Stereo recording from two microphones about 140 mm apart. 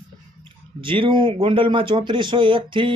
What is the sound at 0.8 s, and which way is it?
Speech, 40° right (ahead or behind).